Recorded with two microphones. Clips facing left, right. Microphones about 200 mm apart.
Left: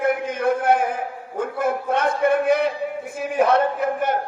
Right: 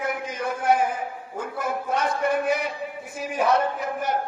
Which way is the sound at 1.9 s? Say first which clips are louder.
Left 4 dB; 55° left (ahead or behind).